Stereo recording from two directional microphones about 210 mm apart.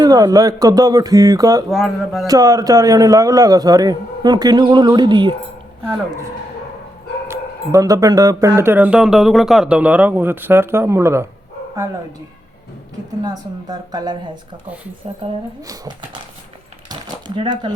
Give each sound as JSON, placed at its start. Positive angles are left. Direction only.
{"t": 0.0, "sound": "speech", "side_deg": -15}
{"t": 1.7, "sound": "speech", "side_deg": 0}
{"t": 2.2, "sound": "speech", "side_deg": -15}
{"t": 7.3, "sound": "speech", "side_deg": -15}
{"t": 13.2, "sound": "speech", "side_deg": -20}
{"t": 15.2, "sound": "speech", "side_deg": -15}
{"t": 16.9, "sound": "a sound", "side_deg": -20}